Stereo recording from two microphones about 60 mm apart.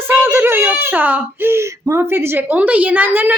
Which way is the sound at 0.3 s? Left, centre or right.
Right.